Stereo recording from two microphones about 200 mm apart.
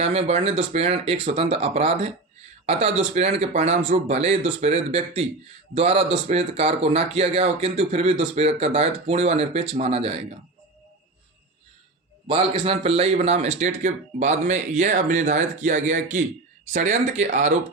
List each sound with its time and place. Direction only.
0.0 s speech: 30° right (ahead or behind)
12.3 s speech: 30° right (ahead or behind)